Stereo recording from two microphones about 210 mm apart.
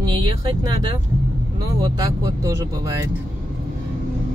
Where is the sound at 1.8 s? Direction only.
15° right (ahead or behind).